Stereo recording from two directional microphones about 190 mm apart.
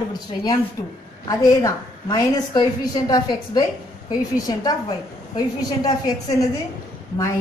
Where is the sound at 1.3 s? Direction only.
20° left (ahead or behind).